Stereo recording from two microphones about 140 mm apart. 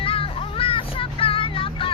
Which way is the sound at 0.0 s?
40° left (ahead or behind).